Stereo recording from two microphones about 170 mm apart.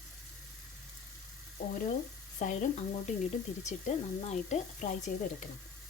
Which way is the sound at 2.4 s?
50° left (ahead or behind).